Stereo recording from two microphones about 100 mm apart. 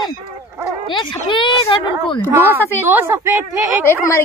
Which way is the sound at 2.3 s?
20° right (ahead or behind).